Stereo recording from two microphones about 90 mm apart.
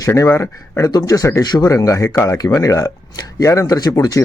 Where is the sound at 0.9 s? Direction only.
45° left (ahead or behind).